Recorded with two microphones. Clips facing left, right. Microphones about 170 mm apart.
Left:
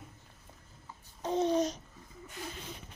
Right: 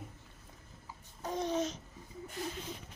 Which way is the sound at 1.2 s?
25° left (ahead or behind).